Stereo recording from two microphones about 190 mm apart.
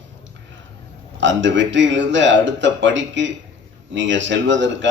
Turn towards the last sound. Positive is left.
turn(degrees=-75)  # may be behind; listen again after turning